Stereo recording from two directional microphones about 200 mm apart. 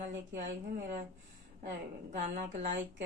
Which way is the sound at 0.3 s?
40° right (ahead or behind).